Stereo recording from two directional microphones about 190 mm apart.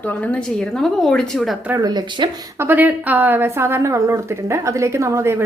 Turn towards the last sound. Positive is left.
turn(degrees=-15)  # may be behind; listen again after turning